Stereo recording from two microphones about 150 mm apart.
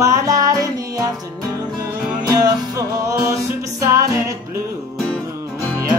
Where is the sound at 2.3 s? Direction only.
25° right (ahead or behind).